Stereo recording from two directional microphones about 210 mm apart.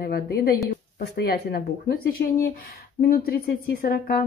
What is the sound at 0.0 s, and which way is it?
Speech, 50° left (ahead or behind).